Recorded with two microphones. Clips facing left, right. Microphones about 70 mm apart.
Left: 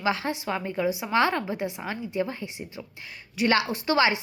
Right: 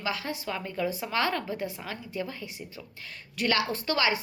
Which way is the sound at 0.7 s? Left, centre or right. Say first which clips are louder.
Left 5 dB; centre.